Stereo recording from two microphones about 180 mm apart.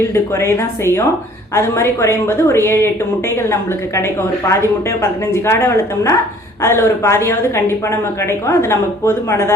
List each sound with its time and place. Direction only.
0.0 s speech: 15° left (ahead or behind)